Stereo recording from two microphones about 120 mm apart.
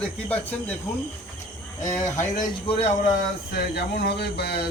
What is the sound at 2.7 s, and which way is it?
Speech, 65° left (ahead or behind).